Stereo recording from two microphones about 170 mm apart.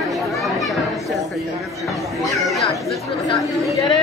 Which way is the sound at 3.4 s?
Centre (ahead or behind).